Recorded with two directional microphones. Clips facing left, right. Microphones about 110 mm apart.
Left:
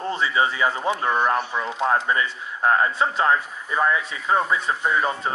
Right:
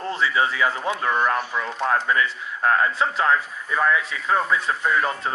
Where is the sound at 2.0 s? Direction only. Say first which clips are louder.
Right 1 dB; 15° left (ahead or behind).